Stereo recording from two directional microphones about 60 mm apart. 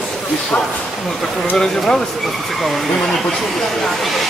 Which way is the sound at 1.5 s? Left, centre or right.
Centre.